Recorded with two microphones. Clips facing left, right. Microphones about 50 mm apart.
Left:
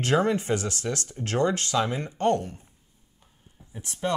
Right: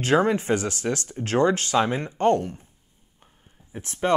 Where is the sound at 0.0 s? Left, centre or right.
Right.